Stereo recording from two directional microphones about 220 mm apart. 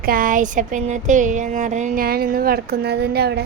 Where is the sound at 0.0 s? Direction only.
40° right (ahead or behind).